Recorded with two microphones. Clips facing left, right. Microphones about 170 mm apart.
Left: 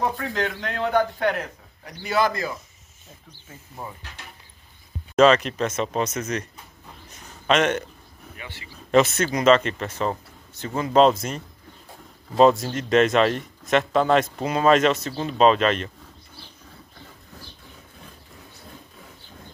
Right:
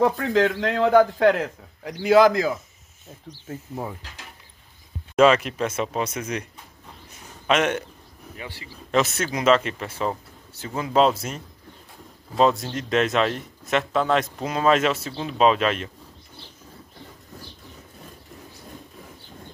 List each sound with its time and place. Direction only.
0.0 s a man's voice: 90° right
3.3 s speech: 70° right (ahead or behind)
5.1 s speech: 10° right (ahead or behind)
7.4 s speech: 5° right (ahead or behind)
8.4 s speech: 35° right (ahead or behind)
8.9 s speech: centre (ahead or behind)